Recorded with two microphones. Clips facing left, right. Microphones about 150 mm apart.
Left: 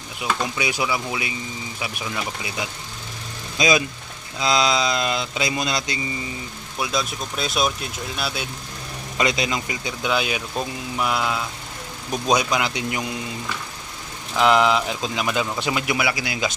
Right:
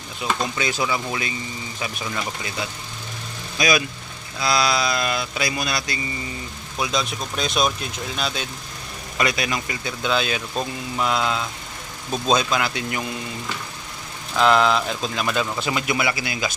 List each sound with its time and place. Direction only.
0.4 s speech: 10° left (ahead or behind)
3.6 s speech: 20° left (ahead or behind)
6.7 s speech: 5° left (ahead or behind)
9.1 s speech: 20° left (ahead or behind)
14.3 s speech: 15° left (ahead or behind)